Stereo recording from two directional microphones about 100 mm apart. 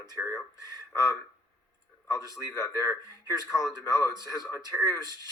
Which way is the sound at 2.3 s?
30° left (ahead or behind).